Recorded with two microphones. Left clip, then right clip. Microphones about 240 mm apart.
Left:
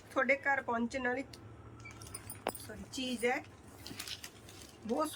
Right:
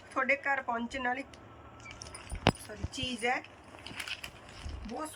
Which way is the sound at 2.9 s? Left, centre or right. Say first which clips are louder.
Right 2 dB; centre.